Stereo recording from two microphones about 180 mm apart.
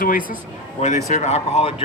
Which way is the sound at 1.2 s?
35° left (ahead or behind).